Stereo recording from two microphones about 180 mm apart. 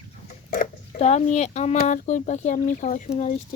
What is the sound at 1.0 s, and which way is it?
Speech, 40° left (ahead or behind).